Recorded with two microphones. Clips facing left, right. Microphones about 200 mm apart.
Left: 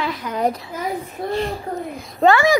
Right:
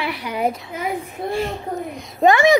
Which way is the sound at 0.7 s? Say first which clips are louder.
Even; 15° right (ahead or behind).